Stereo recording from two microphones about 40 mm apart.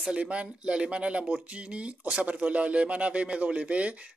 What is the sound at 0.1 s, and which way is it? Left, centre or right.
Speech, right.